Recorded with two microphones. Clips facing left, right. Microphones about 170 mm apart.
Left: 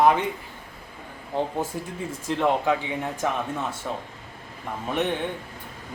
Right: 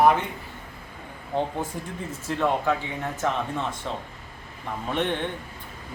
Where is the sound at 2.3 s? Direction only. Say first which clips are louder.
Left 2 dB; 20° left (ahead or behind).